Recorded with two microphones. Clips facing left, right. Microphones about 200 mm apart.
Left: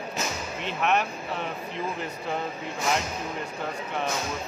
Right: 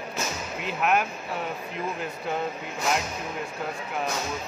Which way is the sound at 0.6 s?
5° right (ahead or behind).